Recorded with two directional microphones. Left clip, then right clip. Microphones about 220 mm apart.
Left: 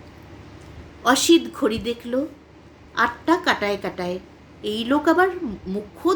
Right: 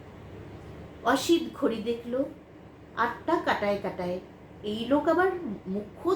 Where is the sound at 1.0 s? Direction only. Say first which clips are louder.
Left 8 dB; 50° left (ahead or behind).